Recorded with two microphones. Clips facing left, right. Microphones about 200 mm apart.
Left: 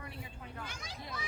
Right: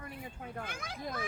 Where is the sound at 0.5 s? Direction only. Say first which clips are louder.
Right 4 dB; 55° right (ahead or behind).